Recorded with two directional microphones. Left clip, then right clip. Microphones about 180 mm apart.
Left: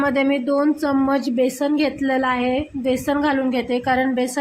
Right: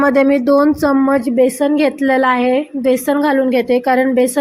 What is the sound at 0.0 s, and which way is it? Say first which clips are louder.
A woman's voice: right 7 dB; 25° right (ahead or behind).